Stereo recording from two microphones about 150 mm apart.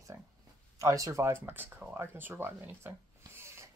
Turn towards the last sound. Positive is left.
turn(degrees=-20)  # may be behind; listen again after turning